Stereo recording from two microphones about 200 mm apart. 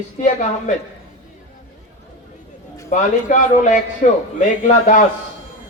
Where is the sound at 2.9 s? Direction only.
35° left (ahead or behind).